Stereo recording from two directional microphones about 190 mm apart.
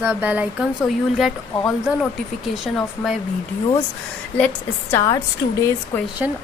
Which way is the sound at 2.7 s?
Centre (ahead or behind).